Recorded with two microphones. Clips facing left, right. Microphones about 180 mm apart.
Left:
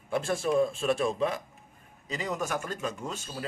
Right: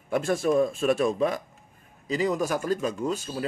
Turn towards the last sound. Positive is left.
turn(degrees=-40)  # may be behind; listen again after turning